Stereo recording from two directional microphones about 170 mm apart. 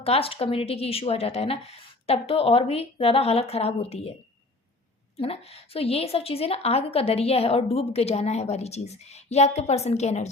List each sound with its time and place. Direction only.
0.0 s a woman's voice: 35° left (ahead or behind)
5.1 s a woman's voice: 35° left (ahead or behind)